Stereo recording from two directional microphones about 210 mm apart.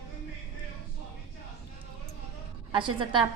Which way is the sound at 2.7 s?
25° right (ahead or behind).